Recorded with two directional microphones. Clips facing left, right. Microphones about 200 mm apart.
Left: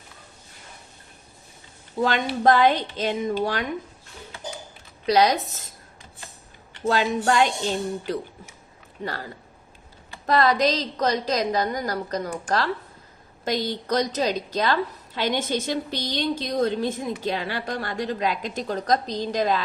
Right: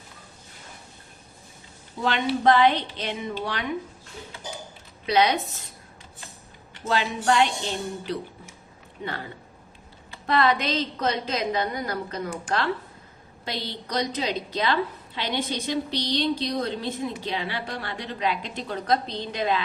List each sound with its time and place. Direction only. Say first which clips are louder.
2.0 s a woman's voice: even; 45° left (ahead or behind)
5.0 s a woman's voice: left 2 dB; 40° left (ahead or behind)
6.8 s a woman's voice: left 2 dB; 45° left (ahead or behind)
10.2 s a woman's voice: left 3 dB; 40° left (ahead or behind)